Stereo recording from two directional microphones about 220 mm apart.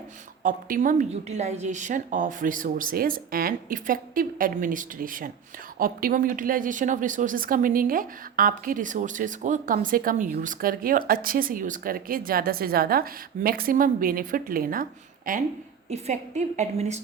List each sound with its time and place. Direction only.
0.4 s speech: 40° right (ahead or behind)